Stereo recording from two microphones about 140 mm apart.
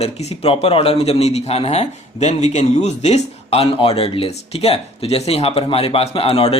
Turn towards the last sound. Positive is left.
turn(degrees=45)  # may be behind; listen again after turning